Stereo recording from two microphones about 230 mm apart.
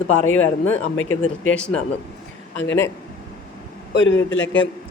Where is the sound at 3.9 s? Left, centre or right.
Left.